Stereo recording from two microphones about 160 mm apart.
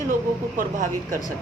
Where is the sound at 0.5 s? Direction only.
55° right (ahead or behind).